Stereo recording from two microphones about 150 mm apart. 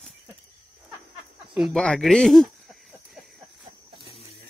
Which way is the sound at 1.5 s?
Centre (ahead or behind).